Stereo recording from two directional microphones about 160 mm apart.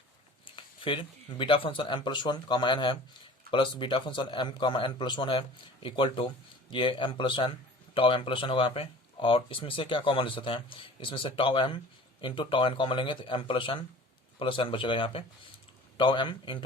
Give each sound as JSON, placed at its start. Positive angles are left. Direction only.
{"t": 0.4, "sound": "a man's voice", "side_deg": 30}